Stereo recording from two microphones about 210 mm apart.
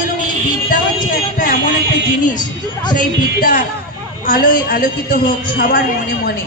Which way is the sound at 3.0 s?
40° left (ahead or behind).